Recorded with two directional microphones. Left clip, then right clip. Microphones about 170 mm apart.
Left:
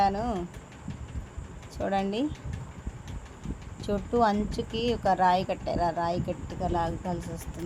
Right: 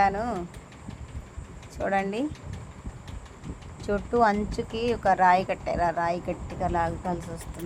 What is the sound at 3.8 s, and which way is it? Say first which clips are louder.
Speech: right 2 dB; 10° right (ahead or behind).